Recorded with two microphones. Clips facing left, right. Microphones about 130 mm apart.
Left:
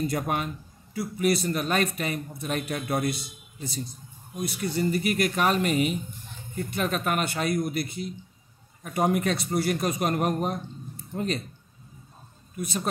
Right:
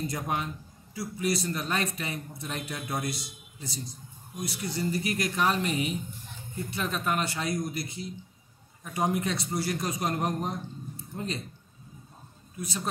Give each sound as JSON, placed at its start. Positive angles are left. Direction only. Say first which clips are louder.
{"t": 0.0, "sound": "a man's voice", "louder": "left 4 dB", "side_deg": 60}
{"t": 12.5, "sound": "speech", "louder": "left 4 dB", "side_deg": 55}